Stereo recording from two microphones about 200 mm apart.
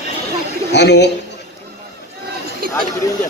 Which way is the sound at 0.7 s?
60° left (ahead or behind).